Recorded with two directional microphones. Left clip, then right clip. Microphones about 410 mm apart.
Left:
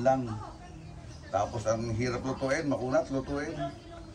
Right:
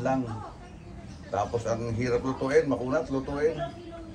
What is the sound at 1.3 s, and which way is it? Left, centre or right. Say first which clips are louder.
A man's voice: right 1 dB; centre.